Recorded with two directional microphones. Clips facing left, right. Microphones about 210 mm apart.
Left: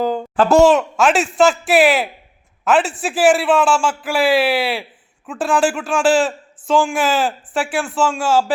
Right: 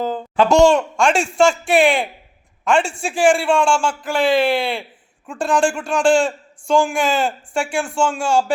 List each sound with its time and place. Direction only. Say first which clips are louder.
0.3 s a man's voice: left 1 dB; 5° left (ahead or behind)